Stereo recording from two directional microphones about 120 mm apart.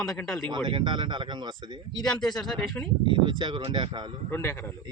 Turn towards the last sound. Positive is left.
turn(degrees=20)  # may be behind; listen again after turning